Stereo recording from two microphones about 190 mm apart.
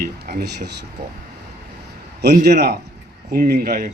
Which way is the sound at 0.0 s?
55° right (ahead or behind).